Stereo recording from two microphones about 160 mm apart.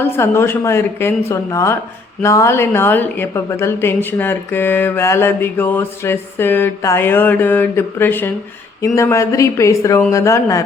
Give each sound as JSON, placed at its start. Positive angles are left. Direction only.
{"t": 0.0, "sound": "a woman's voice", "side_deg": 15}